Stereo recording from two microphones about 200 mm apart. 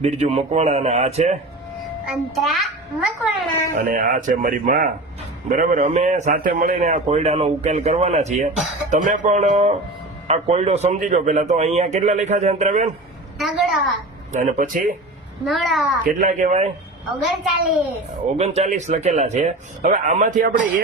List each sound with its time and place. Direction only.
0.0 s a man's voice: 30° right (ahead or behind)
2.0 s a child's voice: centre (ahead or behind)
3.8 s a man's voice: 40° right (ahead or behind)
13.4 s a child's voice: centre (ahead or behind)
14.3 s a man's voice: 40° right (ahead or behind)
15.4 s a child's voice: centre (ahead or behind)
16.0 s a man's voice: 40° right (ahead or behind)
17.1 s a child's voice: centre (ahead or behind)
18.3 s a man's voice: 35° right (ahead or behind)